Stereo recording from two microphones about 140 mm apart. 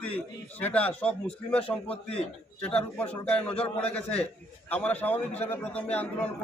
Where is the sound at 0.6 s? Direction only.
10° left (ahead or behind).